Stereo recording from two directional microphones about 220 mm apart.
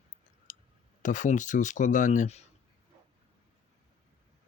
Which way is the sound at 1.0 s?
35° left (ahead or behind).